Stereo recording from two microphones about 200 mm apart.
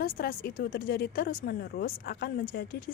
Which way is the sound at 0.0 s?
45° left (ahead or behind).